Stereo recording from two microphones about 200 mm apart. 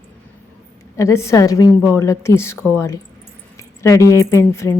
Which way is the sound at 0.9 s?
15° left (ahead or behind).